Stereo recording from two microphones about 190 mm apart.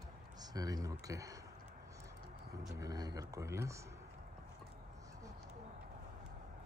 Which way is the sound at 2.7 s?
20° right (ahead or behind).